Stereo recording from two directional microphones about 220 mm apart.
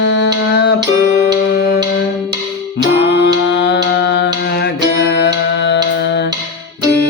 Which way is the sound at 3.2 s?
55° left (ahead or behind).